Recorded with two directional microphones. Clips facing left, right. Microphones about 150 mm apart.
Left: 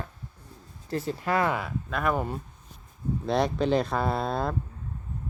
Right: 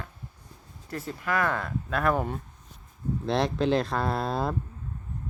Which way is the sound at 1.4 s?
10° left (ahead or behind).